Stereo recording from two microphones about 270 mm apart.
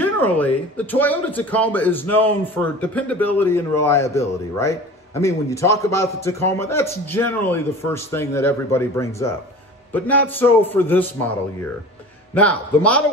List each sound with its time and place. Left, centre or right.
0.0 s speech: centre
12.4 s a man's voice: centre